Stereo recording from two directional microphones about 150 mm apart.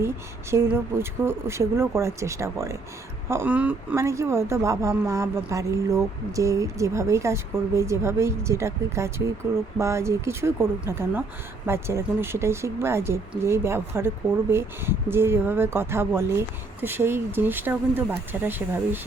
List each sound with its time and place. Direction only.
0.5 s a woman's voice: 15° right (ahead or behind)